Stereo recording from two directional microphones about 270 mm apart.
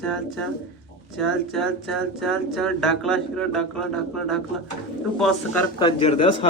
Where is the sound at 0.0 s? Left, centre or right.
Centre.